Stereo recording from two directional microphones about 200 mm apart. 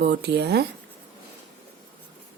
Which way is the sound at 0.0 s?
55° right (ahead or behind).